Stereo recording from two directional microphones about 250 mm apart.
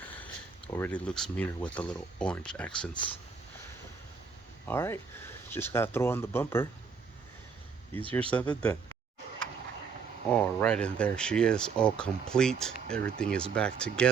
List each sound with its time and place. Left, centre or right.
0.7 s speech: centre
2.9 s speech: centre
4.6 s speech: centre
8.3 s speech: centre
10.2 s speech: centre